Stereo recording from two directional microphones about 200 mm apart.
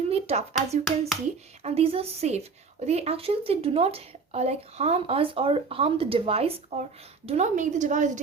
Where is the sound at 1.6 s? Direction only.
30° right (ahead or behind).